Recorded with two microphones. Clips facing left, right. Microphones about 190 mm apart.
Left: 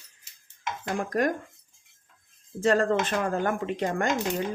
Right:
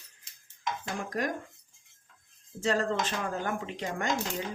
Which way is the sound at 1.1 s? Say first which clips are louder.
Left 7 dB; 55° left (ahead or behind).